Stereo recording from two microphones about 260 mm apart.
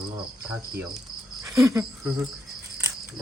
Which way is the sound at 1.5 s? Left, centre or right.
Centre.